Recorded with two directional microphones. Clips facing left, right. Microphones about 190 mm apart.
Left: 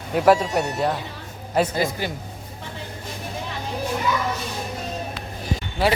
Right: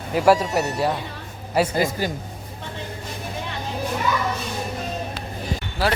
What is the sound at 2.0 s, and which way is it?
Speech, 40° right (ahead or behind).